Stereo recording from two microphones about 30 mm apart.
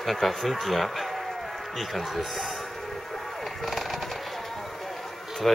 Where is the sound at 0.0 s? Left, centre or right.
Centre.